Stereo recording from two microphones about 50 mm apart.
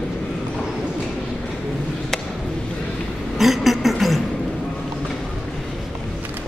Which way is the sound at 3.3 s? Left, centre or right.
Centre.